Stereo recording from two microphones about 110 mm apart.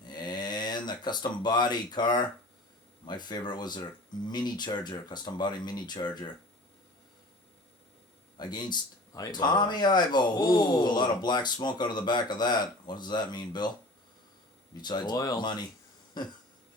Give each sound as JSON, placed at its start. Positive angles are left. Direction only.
{"t": 0.0, "sound": "a sound", "side_deg": 40}
{"t": 3.1, "sound": "speech", "side_deg": 40}
{"t": 8.4, "sound": "speech", "side_deg": 40}
{"t": 14.8, "sound": "speech", "side_deg": 40}